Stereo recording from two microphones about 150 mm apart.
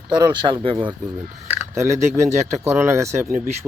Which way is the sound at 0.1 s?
30° right (ahead or behind).